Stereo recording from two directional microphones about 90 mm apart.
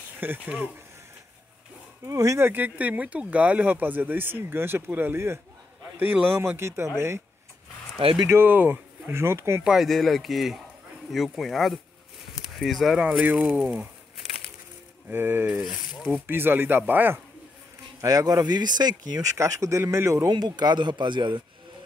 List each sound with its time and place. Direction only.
0.2 s speech: 20° right (ahead or behind)
2.0 s a man's voice: 35° right (ahead or behind)
2.5 s speech: 20° right (ahead or behind)
8.3 s speech: 25° right (ahead or behind)
9.6 s speech: 5° right (ahead or behind)
13.0 s speech: 15° right (ahead or behind)
15.0 s speech: 25° right (ahead or behind)
18.0 s speech: 45° right (ahead or behind)
19.3 s a man's voice: 35° right (ahead or behind)
20.2 s speech: 50° right (ahead or behind)